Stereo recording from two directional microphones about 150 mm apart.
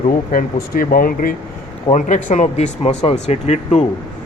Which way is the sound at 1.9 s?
55° left (ahead or behind).